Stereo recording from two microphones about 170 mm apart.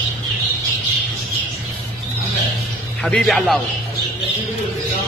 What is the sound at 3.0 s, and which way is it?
Speech, centre (ahead or behind).